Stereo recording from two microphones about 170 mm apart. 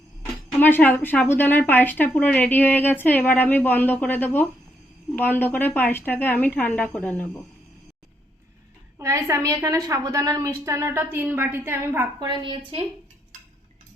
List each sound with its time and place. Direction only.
0.6 s speech: 10° left (ahead or behind)
9.0 s a woman's voice: 15° right (ahead or behind)
12.3 s a woman's voice: 30° right (ahead or behind)